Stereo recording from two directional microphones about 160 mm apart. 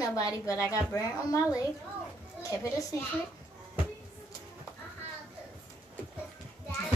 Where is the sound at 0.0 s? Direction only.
20° left (ahead or behind).